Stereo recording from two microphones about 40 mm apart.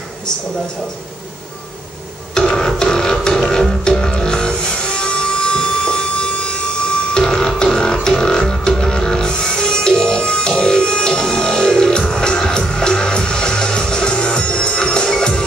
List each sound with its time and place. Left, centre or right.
2.3 s music: centre